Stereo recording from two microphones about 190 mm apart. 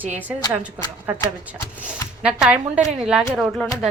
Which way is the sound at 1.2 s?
5° right (ahead or behind).